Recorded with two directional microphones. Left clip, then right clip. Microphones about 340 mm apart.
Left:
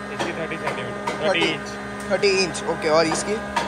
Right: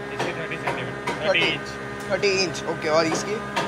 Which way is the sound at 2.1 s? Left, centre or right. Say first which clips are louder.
Left 2 dB; centre.